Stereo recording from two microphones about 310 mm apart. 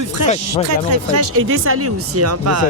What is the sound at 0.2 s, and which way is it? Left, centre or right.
Speech, right.